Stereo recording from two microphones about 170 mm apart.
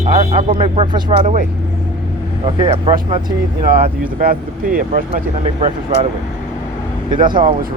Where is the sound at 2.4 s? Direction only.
30° right (ahead or behind).